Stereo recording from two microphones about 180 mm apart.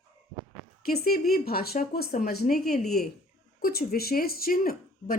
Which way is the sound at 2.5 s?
Centre (ahead or behind).